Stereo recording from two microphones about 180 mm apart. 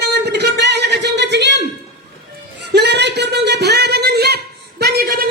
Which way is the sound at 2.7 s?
70° right (ahead or behind).